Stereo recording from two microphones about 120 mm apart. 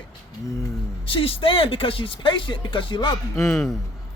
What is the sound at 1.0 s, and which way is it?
A man's voice, 50° left (ahead or behind).